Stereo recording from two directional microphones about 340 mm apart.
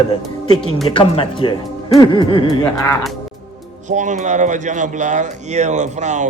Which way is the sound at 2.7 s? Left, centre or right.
Centre.